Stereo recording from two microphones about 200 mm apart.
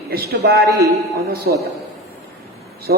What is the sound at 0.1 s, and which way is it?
A man's voice, 50° right (ahead or behind).